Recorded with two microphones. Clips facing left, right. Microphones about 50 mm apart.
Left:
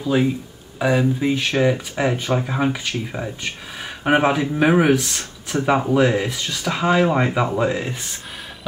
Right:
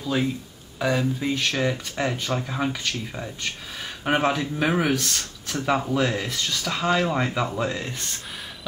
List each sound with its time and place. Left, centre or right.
0.0 s speech: centre